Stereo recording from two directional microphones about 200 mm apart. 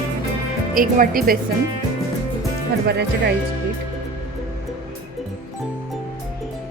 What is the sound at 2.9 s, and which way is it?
Speech, 55° right (ahead or behind).